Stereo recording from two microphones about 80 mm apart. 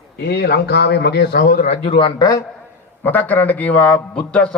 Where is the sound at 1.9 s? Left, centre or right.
Left.